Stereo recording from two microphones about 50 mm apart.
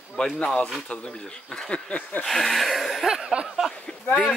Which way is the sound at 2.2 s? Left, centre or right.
Centre.